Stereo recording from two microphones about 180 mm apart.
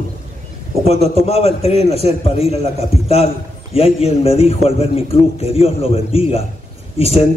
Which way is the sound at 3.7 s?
35° left (ahead or behind).